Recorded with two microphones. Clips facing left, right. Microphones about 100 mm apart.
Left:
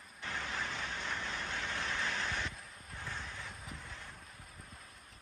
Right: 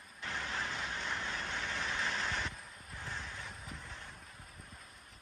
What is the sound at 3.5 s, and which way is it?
Vehicle, 5° left (ahead or behind).